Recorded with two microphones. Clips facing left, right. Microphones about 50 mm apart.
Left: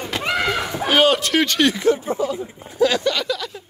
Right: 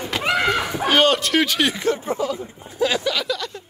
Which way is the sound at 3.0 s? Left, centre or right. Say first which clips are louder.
Left 2 dB; centre.